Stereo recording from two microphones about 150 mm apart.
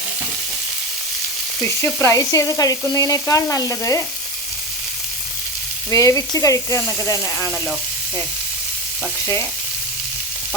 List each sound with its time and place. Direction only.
2.0 s sizzle: 20° left (ahead or behind)
5.9 s sizzle: 20° left (ahead or behind)
9.2 s sizzle: 20° left (ahead or behind)